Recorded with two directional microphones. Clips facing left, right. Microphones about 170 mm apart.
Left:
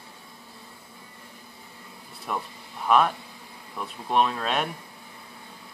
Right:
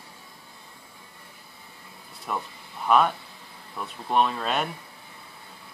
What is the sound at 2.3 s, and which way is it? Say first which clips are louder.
Speech: even; centre (ahead or behind).